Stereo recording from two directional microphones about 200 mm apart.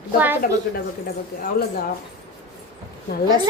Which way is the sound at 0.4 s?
45° left (ahead or behind).